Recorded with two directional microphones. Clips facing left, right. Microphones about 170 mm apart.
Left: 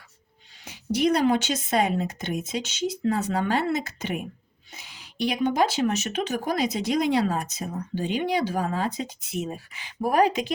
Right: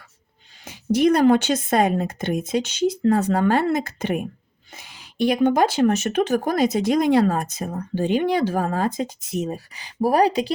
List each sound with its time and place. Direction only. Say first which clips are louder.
0.6 s speech: right 5 dB; 50° right (ahead or behind); by 10.5 s 35° right (ahead or behind)